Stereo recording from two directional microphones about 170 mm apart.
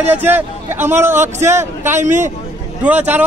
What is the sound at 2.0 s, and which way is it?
Speech, 45° right (ahead or behind).